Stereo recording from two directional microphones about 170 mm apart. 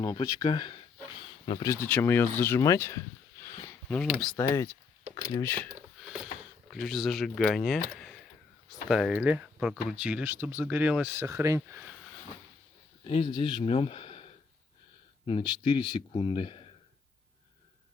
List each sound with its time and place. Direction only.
0.0 s speech: 25° left (ahead or behind)
1.6 s speech: 15° left (ahead or behind)
4.0 s speech: centre (ahead or behind)
4.4 s speech: 15° left (ahead or behind)
6.0 s a sound: 5° right (ahead or behind)
6.7 s speech: centre (ahead or behind); by 11.9 s 15° right (ahead or behind)
13.1 s speech: 30° left (ahead or behind)